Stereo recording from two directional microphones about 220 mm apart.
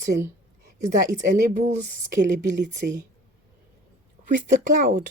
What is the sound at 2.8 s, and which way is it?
Speech, 45° right (ahead or behind).